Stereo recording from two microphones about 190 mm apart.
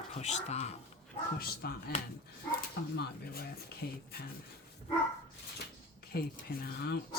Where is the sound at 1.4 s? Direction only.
55° left (ahead or behind).